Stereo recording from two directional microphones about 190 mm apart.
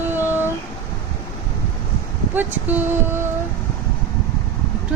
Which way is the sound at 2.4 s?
10° right (ahead or behind).